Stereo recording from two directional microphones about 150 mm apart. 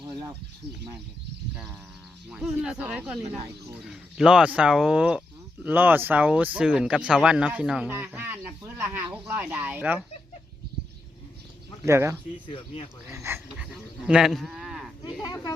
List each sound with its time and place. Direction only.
2.3 s speech: 5° right (ahead or behind)
11.9 s speech: 20° right (ahead or behind)
12.5 s speech: 35° left (ahead or behind)
13.1 s speech: 20° right (ahead or behind)
14.1 s speech: 5° right (ahead or behind)
15.2 s speech: 25° left (ahead or behind)